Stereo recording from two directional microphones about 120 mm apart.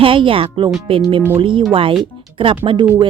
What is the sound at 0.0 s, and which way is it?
Speech, 50° right (ahead or behind).